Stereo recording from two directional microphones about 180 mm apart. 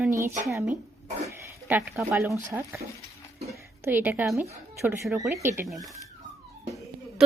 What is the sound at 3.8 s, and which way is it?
Speech, 10° right (ahead or behind).